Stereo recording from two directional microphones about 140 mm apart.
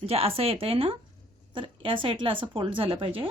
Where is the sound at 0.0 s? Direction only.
45° right (ahead or behind).